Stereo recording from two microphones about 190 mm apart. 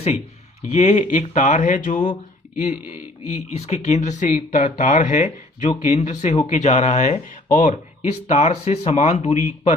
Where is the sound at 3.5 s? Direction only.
35° left (ahead or behind).